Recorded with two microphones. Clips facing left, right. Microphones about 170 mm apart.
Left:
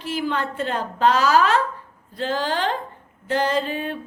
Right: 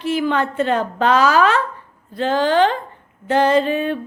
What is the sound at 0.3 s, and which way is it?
A woman's voice, 70° right (ahead or behind).